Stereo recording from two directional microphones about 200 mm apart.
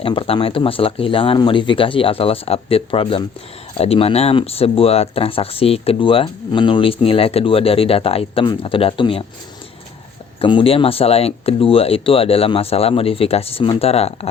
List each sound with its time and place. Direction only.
0.0 s speech: 25° left (ahead or behind)
10.4 s speech: 25° left (ahead or behind)